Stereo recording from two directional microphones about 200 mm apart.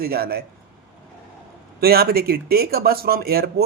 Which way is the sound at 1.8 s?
50° right (ahead or behind).